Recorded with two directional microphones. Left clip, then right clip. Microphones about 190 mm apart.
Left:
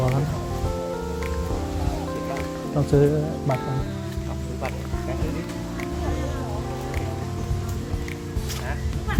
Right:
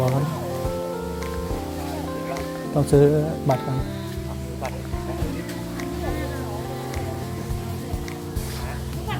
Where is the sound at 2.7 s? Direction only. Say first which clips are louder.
Right 3 dB; 25° right (ahead or behind).